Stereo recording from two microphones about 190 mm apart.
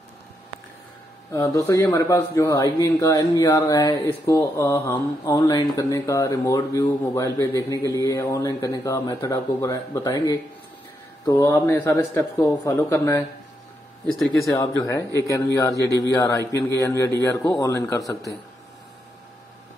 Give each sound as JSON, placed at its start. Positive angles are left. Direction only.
{"t": 1.3, "sound": "speech", "side_deg": 20}
{"t": 14.4, "sound": "speech", "side_deg": 20}